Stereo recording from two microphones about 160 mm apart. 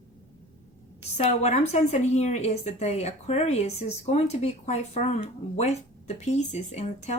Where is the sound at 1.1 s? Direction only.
45° left (ahead or behind).